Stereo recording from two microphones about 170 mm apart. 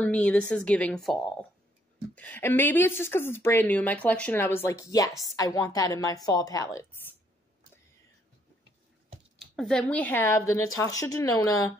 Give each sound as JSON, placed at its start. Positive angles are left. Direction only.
{"t": 0.0, "sound": "a woman's voice", "side_deg": 10}
{"t": 9.6, "sound": "a woman's voice", "side_deg": 5}